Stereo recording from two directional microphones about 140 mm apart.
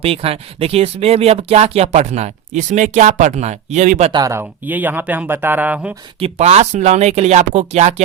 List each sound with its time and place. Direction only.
0.0 s speech: 45° right (ahead or behind)
4.1 s speech: 25° right (ahead or behind)
6.1 s speech: 45° right (ahead or behind)